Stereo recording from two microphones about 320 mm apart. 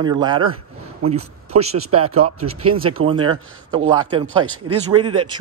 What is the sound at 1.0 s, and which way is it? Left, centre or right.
Speech, right.